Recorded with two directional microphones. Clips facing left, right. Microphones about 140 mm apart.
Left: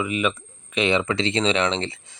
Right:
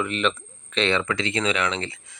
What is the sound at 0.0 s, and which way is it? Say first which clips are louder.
Speech: left 1 dB; 10° left (ahead or behind).